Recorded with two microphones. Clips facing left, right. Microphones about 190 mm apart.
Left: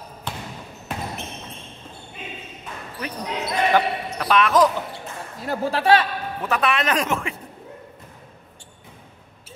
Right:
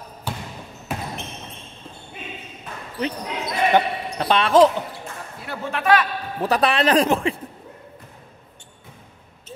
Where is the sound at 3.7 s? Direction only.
30° right (ahead or behind).